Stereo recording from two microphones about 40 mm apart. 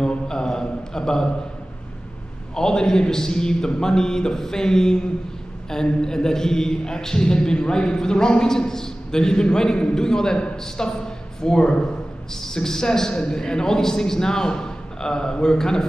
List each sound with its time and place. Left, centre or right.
0.0 s mantra: left
2.5 s a man's voice: centre